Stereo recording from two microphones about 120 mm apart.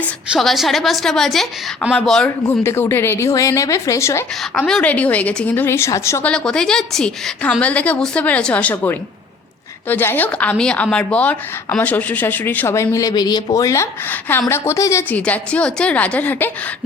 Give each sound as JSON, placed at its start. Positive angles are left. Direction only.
{"t": 0.3, "sound": "a woman's voice", "side_deg": 0}
{"t": 2.6, "sound": "a woman's voice", "side_deg": 20}
{"t": 4.5, "sound": "speech", "side_deg": 5}
{"t": 6.2, "sound": "speech", "side_deg": 5}
{"t": 14.1, "sound": "a woman's voice", "side_deg": 15}
{"t": 15.1, "sound": "speech", "side_deg": 10}